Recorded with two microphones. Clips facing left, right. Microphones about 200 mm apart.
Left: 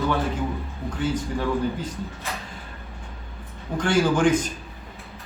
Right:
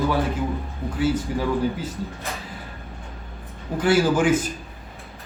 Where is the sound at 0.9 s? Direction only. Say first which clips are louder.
Right 3 dB; 5° right (ahead or behind).